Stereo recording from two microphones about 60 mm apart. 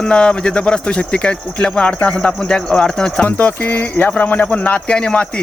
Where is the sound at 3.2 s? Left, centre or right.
Left.